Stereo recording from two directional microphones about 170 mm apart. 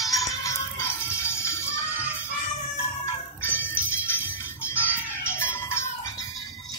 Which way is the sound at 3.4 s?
15° left (ahead or behind).